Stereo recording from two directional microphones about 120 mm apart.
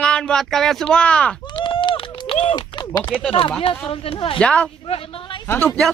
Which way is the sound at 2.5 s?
35° left (ahead or behind).